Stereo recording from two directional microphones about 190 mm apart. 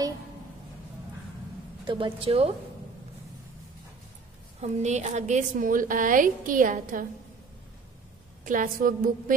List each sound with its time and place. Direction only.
1.9 s a woman's voice: 25° right (ahead or behind)
4.6 s a woman's voice: 35° right (ahead or behind)
8.5 s a woman's voice: 45° right (ahead or behind)